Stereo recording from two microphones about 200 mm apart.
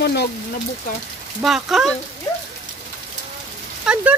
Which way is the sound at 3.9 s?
5° right (ahead or behind).